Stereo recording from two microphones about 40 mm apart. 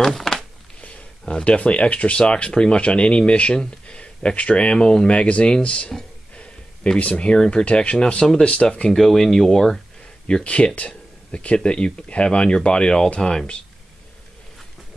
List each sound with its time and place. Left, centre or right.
0.1 s a sound: centre
1.3 s speech: left
7.0 s speech: left
8.9 s speech: centre
10.2 s speech: left